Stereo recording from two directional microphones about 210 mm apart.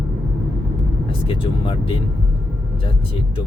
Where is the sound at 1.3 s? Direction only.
25° left (ahead or behind).